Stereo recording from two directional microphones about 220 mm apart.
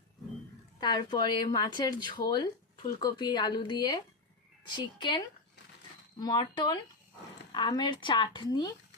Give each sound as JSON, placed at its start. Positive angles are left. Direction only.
{"t": 0.8, "sound": "speech", "side_deg": 20}